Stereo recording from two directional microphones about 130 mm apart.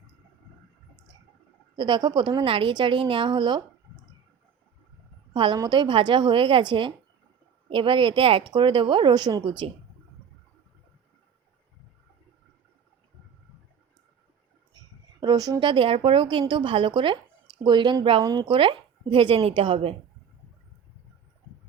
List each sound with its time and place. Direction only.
1.7 s speech: 35° right (ahead or behind)
5.3 s a woman's voice: 40° right (ahead or behind)
15.2 s speech: 30° right (ahead or behind)